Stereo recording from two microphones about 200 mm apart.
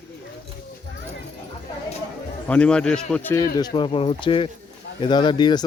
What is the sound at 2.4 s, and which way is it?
Speech, 5° left (ahead or behind).